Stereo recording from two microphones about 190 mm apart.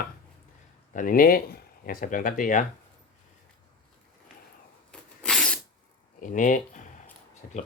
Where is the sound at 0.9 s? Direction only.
45° left (ahead or behind).